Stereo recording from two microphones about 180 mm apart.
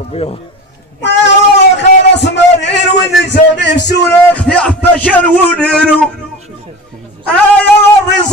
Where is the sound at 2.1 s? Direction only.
75° left (ahead or behind).